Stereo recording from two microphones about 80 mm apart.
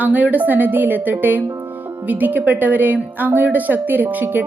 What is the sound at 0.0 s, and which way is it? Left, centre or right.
Music, centre.